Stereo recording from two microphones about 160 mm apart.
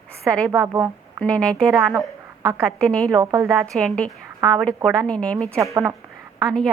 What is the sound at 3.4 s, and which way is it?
A woman's voice, 5° left (ahead or behind).